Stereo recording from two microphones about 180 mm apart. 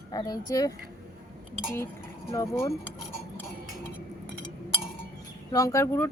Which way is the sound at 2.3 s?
15° left (ahead or behind).